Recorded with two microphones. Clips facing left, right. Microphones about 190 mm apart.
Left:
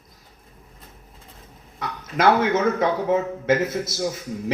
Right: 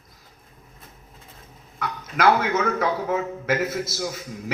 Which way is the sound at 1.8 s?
25° left (ahead or behind).